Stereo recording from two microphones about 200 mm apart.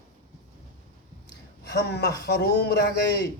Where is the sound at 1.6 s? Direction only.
55° left (ahead or behind).